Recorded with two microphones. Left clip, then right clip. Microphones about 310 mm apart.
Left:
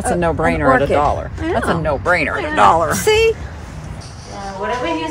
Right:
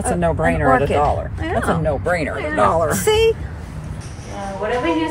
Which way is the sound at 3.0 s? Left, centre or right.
Left.